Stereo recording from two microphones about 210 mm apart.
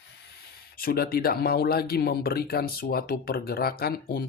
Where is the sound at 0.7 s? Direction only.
45° left (ahead or behind).